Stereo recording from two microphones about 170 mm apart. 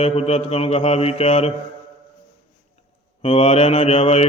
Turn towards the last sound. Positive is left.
turn(degrees=35)  # may be behind; listen again after turning